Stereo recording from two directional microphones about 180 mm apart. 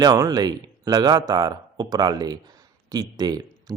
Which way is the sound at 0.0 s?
20° right (ahead or behind).